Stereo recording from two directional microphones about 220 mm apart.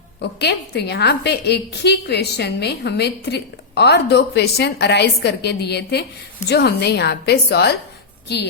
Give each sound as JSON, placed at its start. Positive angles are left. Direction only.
{"t": 0.2, "sound": "a woman's voice", "side_deg": 50}